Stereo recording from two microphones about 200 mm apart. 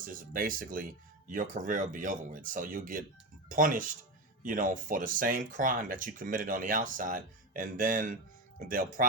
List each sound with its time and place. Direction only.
0.0 s speech: 45° right (ahead or behind)